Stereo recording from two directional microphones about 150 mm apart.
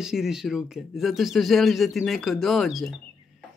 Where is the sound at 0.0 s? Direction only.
5° right (ahead or behind).